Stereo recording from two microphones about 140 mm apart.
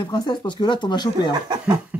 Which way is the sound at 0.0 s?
30° left (ahead or behind).